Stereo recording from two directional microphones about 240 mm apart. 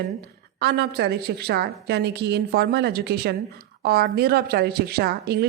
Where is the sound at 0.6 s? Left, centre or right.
Right.